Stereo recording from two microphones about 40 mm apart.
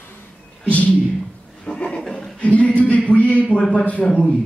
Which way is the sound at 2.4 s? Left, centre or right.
Left.